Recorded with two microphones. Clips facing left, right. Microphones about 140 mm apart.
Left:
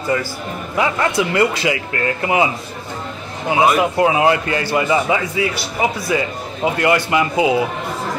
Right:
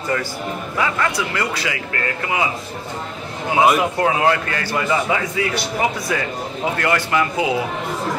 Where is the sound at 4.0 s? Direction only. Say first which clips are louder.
Left 3 dB; 10° left (ahead or behind).